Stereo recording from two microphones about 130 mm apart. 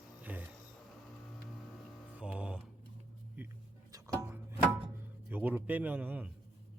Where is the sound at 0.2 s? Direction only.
10° right (ahead or behind).